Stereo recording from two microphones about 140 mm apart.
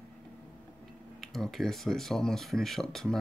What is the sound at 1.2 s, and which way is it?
Speech, centre (ahead or behind).